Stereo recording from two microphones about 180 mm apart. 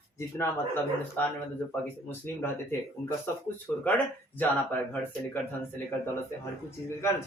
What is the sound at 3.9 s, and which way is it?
Speech, 10° left (ahead or behind).